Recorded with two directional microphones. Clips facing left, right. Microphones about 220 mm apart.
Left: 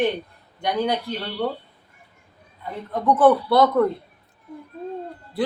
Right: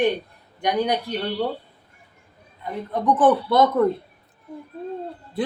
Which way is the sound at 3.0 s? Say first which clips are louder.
Left 2 dB; 20° right (ahead or behind).